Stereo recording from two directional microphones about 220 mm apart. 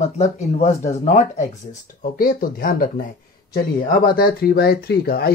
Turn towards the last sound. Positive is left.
turn(degrees=45)  # may be behind; listen again after turning